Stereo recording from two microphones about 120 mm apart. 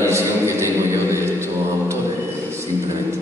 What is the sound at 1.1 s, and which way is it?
Mantra, 20° right (ahead or behind).